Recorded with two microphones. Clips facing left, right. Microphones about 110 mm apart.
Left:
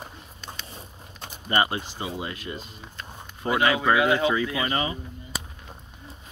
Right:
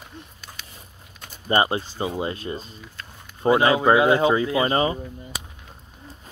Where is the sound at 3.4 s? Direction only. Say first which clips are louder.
Right 5 dB; 30° right (ahead or behind).